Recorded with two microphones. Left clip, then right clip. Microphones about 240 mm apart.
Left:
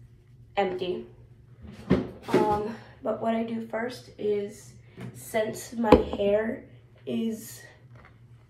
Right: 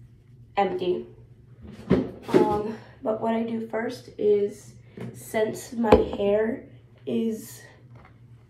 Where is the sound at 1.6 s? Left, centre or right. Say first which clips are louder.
Right 3 dB; centre.